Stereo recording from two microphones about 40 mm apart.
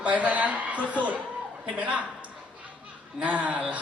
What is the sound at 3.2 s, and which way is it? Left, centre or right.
Speech, right.